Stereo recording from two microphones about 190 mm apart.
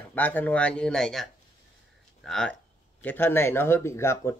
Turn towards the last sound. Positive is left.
turn(degrees=15)  # may be behind; listen again after turning